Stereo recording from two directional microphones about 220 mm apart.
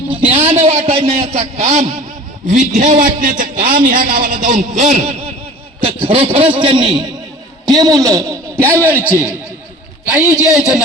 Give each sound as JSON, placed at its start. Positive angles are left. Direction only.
{"t": 0.3, "sound": "a man's voice", "side_deg": -25}
{"t": 10.1, "sound": "speech", "side_deg": -5}